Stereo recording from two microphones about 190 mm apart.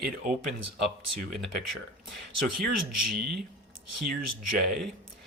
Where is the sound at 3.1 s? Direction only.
55° right (ahead or behind).